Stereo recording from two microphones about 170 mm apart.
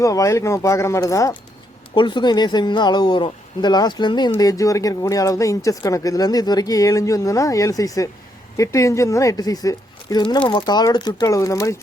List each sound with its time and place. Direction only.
0.0 s speech: 20° left (ahead or behind)